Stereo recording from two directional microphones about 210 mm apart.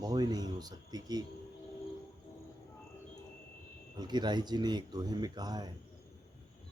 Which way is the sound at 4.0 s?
20° right (ahead or behind).